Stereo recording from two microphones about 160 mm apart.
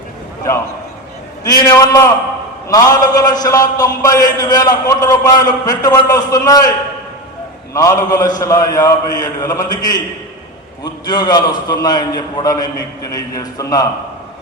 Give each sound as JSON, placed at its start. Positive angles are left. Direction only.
{"t": 1.5, "sound": "a man's voice", "side_deg": 20}
{"t": 7.7, "sound": "a man's voice", "side_deg": 20}
{"t": 11.0, "sound": "a man's voice", "side_deg": 25}